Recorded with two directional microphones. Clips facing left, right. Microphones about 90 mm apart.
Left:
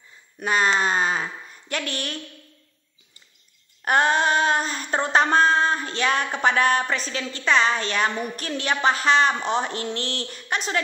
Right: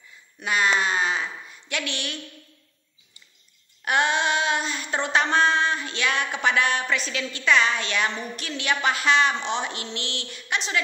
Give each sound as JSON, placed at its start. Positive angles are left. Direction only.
{"t": 0.4, "sound": "child singing", "side_deg": 40}
{"t": 3.8, "sound": "child singing", "side_deg": 40}